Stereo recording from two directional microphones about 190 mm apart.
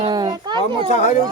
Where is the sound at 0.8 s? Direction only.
35° left (ahead or behind).